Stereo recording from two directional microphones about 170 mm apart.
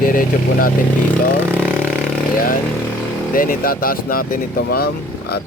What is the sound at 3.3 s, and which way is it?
Speech, 55° left (ahead or behind).